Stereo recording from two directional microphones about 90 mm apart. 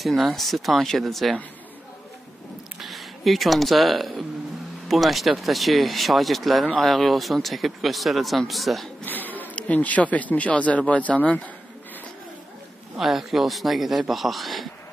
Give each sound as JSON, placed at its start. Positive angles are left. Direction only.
{"t": 0.0, "sound": "speech", "side_deg": 0}
{"t": 2.8, "sound": "speech", "side_deg": 0}
{"t": 9.0, "sound": "speech", "side_deg": 20}
{"t": 12.9, "sound": "speech", "side_deg": 0}